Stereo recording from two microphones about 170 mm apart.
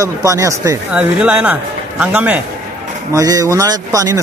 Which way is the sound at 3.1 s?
20° right (ahead or behind).